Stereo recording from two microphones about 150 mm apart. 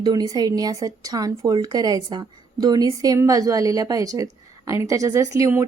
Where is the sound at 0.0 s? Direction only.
25° right (ahead or behind).